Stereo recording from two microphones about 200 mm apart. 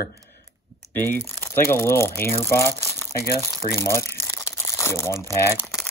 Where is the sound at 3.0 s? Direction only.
15° left (ahead or behind).